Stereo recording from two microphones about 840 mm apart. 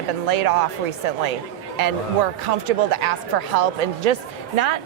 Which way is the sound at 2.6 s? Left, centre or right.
Right.